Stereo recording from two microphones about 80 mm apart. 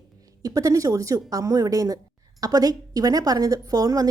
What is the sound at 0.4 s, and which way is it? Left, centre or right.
Speech, right.